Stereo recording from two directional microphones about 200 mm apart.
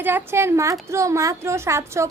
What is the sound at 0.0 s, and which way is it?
A woman's voice, 10° right (ahead or behind).